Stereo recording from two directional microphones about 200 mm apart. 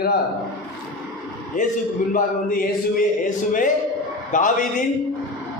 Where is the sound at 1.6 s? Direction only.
40° left (ahead or behind).